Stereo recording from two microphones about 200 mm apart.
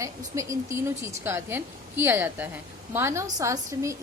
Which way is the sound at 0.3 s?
15° right (ahead or behind).